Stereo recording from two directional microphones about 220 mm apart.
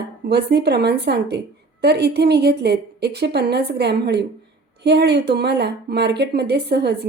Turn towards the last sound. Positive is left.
turn(degrees=-50)  # may be behind; listen again after turning